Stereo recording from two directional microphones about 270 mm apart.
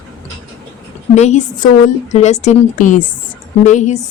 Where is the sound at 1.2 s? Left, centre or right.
Left.